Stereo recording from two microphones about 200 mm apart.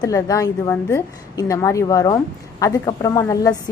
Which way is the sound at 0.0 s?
15° left (ahead or behind).